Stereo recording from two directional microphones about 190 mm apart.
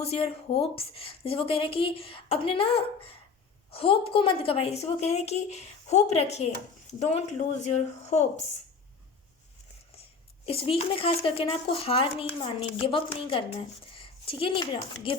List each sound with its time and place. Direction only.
0.0 s a woman's voice: 30° left (ahead or behind)
10.4 s a woman's voice: 30° left (ahead or behind)